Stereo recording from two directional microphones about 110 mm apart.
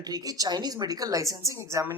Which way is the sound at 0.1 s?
35° right (ahead or behind).